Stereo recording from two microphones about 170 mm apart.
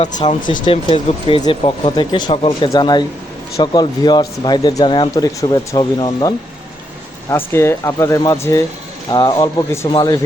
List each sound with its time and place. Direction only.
0.2 s speech: 30° left (ahead or behind)